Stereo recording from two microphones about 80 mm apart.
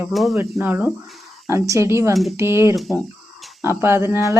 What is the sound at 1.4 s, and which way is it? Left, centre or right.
Speech, right.